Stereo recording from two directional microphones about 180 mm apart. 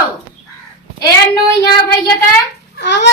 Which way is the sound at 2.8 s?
75° left (ahead or behind).